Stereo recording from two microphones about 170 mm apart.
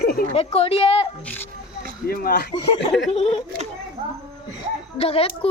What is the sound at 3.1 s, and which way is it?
Speech, 40° left (ahead or behind).